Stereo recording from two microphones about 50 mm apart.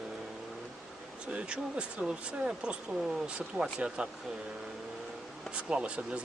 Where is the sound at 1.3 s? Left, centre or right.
Right.